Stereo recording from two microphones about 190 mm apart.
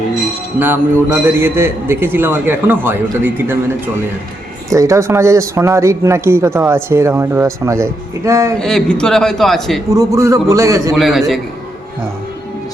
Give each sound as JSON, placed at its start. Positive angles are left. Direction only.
{"t": 0.6, "sound": "a man's voice", "side_deg": -10}
{"t": 4.7, "sound": "a man's voice", "side_deg": -15}
{"t": 8.5, "sound": "a man's voice", "side_deg": 5}
{"t": 9.9, "sound": "a man's voice", "side_deg": -15}
{"t": 10.9, "sound": "a man's voice", "side_deg": 0}